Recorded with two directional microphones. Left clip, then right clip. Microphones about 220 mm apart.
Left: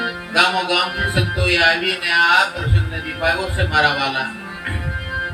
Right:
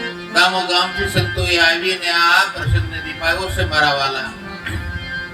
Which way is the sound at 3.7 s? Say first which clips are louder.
Right 1 dB; 50° right (ahead or behind).